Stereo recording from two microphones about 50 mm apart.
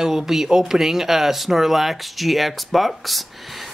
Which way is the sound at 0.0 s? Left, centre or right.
Centre.